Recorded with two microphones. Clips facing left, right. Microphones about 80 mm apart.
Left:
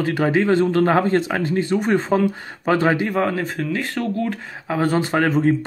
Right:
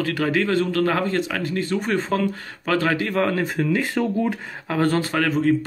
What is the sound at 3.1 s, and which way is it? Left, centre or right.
Speech, centre.